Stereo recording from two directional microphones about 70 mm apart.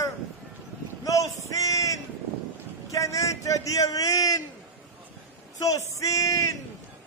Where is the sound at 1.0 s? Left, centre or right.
Left.